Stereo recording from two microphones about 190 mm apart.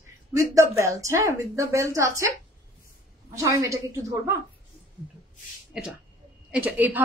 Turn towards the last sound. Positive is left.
turn(degrees=-10)  # may be behind; listen again after turning